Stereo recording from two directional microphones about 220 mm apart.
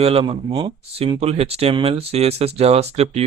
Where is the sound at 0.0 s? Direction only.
25° right (ahead or behind).